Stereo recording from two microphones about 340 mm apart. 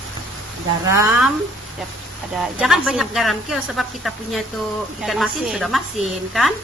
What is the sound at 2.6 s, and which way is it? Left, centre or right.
A woman's voice, centre.